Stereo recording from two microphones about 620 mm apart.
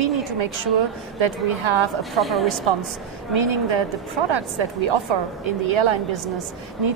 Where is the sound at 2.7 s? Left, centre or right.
Right.